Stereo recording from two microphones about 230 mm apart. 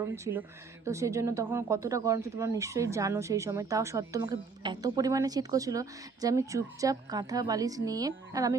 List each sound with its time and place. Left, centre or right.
0.0 s speech: centre